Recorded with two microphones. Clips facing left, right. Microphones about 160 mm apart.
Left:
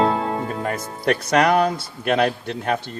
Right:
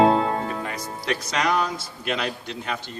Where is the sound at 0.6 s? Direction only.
50° left (ahead or behind).